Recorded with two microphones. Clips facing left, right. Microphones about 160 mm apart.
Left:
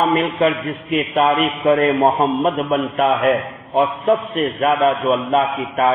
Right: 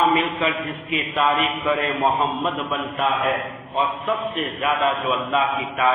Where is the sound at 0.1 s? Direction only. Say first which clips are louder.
Left 5 dB; 50° left (ahead or behind).